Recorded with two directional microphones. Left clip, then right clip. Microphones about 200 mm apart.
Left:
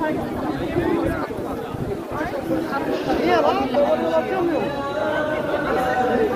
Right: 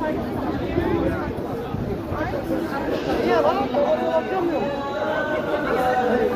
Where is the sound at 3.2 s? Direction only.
50° left (ahead or behind).